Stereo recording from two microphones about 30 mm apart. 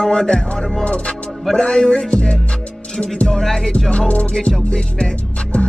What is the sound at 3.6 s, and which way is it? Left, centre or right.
Music, left.